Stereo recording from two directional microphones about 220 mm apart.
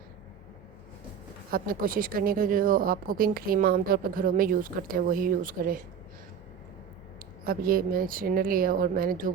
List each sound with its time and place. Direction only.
1.5 s a woman's voice: 40° right (ahead or behind)
7.4 s a woman's voice: 40° right (ahead or behind)